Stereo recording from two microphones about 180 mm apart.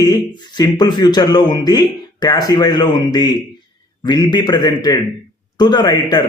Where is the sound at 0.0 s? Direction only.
25° left (ahead or behind).